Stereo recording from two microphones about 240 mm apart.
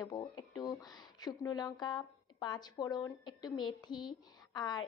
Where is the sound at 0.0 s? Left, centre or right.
Centre.